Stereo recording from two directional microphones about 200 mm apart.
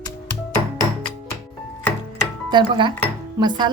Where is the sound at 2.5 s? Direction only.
25° right (ahead or behind).